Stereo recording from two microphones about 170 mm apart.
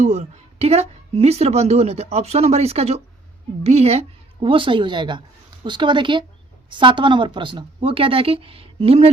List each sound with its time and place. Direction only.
0.0 s a woman's voice: 40° right (ahead or behind)